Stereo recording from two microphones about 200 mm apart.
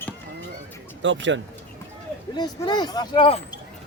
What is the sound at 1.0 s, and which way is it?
Speech, 65° right (ahead or behind).